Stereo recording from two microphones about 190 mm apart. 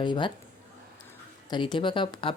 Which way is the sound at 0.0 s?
25° left (ahead or behind).